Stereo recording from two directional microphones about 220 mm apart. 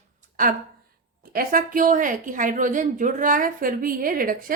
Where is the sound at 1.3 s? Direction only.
40° right (ahead or behind).